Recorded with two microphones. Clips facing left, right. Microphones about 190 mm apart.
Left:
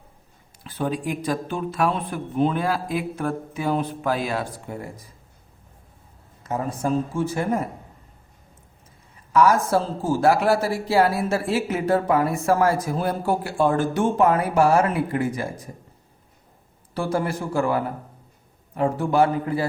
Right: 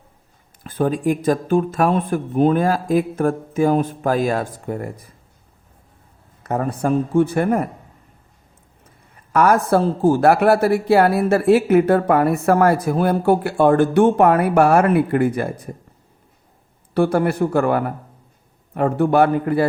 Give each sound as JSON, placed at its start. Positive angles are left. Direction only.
{"t": 0.6, "sound": "speech", "side_deg": -50}
{"t": 6.4, "sound": "a man's voice", "side_deg": -60}
{"t": 9.3, "sound": "a man's voice", "side_deg": -60}
{"t": 16.9, "sound": "a man's voice", "side_deg": -60}